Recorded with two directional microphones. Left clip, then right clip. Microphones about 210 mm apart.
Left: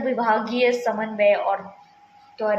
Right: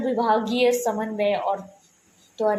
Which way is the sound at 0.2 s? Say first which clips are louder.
Even; 35° right (ahead or behind).